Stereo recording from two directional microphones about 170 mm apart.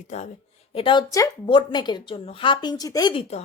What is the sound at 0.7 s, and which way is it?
A woman's voice, 30° left (ahead or behind).